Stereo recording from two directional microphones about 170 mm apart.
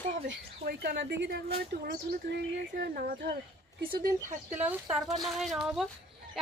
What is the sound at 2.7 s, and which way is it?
Speech, 60° right (ahead or behind).